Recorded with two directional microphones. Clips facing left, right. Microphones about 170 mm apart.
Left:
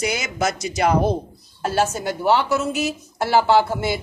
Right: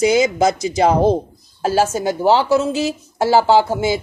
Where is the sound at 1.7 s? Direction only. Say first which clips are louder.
Right 4 dB; 90° right.